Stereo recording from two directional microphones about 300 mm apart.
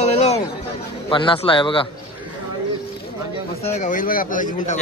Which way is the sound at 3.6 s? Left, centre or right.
Left.